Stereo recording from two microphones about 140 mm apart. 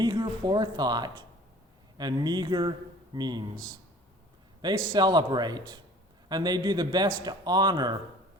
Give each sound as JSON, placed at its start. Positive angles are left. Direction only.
{"t": 0.0, "sound": "speech", "side_deg": -30}
{"t": 4.9, "sound": "speech", "side_deg": -30}